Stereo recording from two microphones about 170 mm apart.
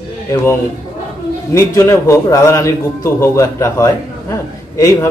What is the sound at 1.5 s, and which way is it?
A man's voice, 15° left (ahead or behind).